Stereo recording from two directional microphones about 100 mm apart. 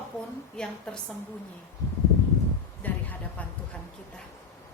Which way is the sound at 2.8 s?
15° left (ahead or behind).